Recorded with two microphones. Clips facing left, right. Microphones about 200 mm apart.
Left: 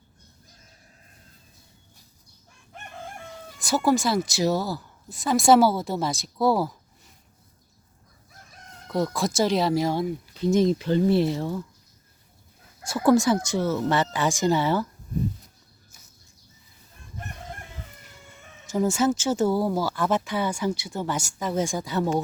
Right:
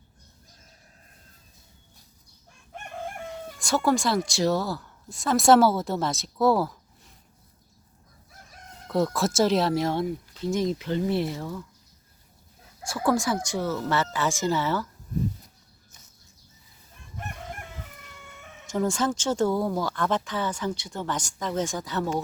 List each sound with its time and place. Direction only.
3.6 s a woman's voice: 5° left (ahead or behind)
8.9 s a woman's voice: centre (ahead or behind)
10.4 s speech: 25° left (ahead or behind)
13.1 s speech: 20° left (ahead or behind)
18.7 s speech: 10° left (ahead or behind)